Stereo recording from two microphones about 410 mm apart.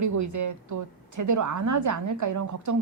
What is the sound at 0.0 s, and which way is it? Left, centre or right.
A woman's voice, right.